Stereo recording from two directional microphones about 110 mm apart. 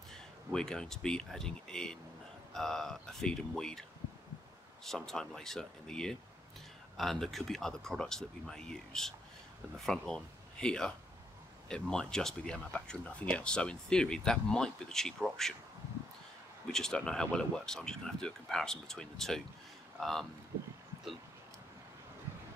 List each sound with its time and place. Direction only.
0.1 s speech: 5° left (ahead or behind)
4.8 s speech: 5° left (ahead or behind)
16.7 s speech: 5° left (ahead or behind)